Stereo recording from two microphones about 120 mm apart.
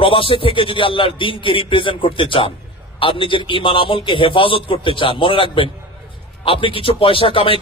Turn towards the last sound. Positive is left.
turn(degrees=50)  # may be behind; listen again after turning